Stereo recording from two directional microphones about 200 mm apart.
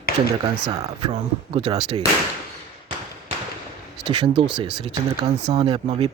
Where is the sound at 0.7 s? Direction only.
20° right (ahead or behind).